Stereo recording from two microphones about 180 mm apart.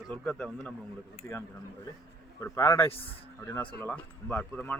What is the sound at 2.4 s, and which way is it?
Speech, 15° left (ahead or behind).